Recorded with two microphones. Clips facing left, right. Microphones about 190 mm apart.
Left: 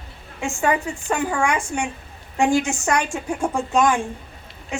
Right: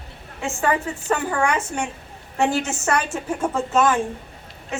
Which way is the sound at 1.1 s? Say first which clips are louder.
Even; 10° left (ahead or behind).